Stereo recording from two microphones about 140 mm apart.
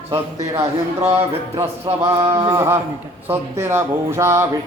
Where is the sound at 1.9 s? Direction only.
25° right (ahead or behind).